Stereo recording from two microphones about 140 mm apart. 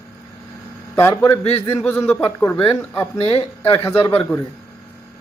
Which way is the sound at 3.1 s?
40° left (ahead or behind).